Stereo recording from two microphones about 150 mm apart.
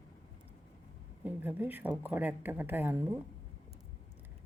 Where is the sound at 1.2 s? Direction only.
10° right (ahead or behind).